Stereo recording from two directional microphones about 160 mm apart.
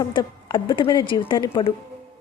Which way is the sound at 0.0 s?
25° left (ahead or behind).